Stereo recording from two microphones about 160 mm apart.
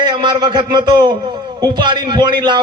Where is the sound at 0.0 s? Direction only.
30° right (ahead or behind).